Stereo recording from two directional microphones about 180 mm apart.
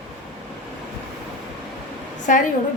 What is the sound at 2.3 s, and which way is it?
Speech, 45° left (ahead or behind).